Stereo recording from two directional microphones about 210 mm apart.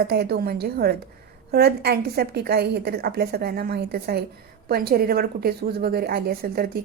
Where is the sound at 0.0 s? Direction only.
50° right (ahead or behind).